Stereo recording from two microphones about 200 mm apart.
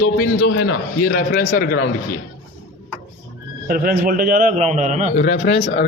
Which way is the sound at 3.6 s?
45° right (ahead or behind).